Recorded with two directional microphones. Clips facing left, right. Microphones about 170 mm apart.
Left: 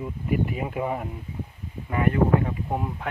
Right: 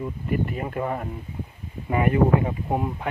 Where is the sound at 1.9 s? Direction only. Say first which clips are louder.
Right 2 dB; 15° right (ahead or behind).